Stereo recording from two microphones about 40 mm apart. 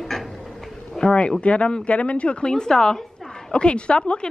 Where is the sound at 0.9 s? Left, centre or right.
Left.